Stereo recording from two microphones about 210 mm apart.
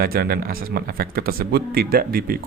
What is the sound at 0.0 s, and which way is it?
Speech, 45° right (ahead or behind).